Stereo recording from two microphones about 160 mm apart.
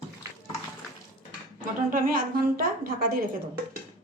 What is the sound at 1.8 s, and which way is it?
A woman's voice, 60° right (ahead or behind).